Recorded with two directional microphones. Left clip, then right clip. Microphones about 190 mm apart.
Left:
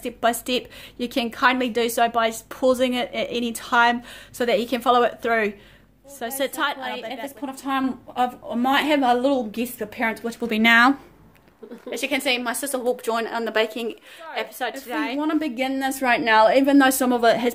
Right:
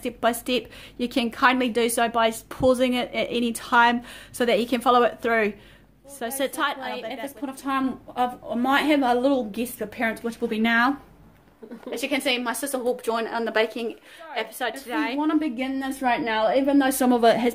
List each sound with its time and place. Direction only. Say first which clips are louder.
0.0 s a woman's voice: left 2 dB; centre (ahead or behind)
10.5 s speech: left 6 dB; 40° left (ahead or behind)
11.9 s a woman's voice: left 2 dB; 5° left (ahead or behind); by 16.8 s 25° left (ahead or behind)
17.0 s a woman's voice: even; centre (ahead or behind)